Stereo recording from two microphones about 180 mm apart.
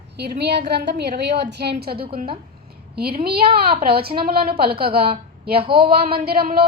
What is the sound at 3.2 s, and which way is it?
A woman's voice, 60° right (ahead or behind).